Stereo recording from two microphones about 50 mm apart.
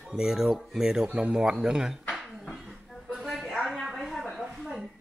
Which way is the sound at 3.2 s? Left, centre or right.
Centre.